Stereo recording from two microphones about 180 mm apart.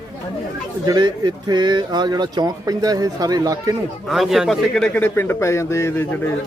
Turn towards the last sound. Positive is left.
turn(degrees=10)  # may be behind; listen again after turning